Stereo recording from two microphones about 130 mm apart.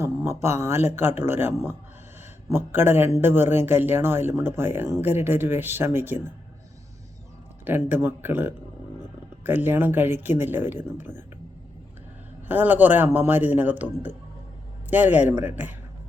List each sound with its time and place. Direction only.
0.0 s a sound: 20° right (ahead or behind)
0.6 s speech: 20° right (ahead or behind)
7.6 s speech: 15° right (ahead or behind)
12.5 s speech: 15° right (ahead or behind)